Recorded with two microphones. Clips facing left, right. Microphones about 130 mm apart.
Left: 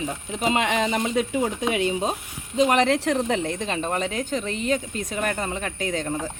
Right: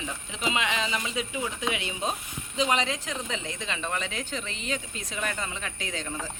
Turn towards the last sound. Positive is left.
turn(degrees=45)  # may be behind; listen again after turning